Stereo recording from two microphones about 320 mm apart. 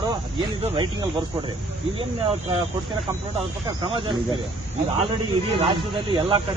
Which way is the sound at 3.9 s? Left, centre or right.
Centre.